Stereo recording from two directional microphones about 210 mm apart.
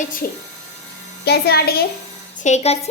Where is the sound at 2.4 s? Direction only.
30° left (ahead or behind).